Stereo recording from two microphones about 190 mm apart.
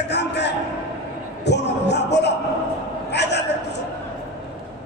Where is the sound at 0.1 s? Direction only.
65° left (ahead or behind).